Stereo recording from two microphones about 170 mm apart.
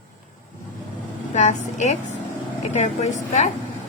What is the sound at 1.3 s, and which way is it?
A woman's voice, 45° left (ahead or behind).